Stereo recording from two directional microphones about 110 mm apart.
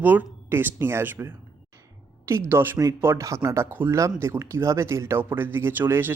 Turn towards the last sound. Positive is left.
turn(degrees=-20)  # may be behind; listen again after turning